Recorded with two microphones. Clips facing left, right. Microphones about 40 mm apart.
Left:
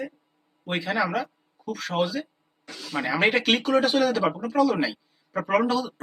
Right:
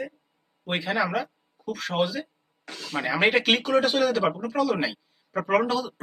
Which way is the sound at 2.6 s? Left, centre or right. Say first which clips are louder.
Right 1 dB; right.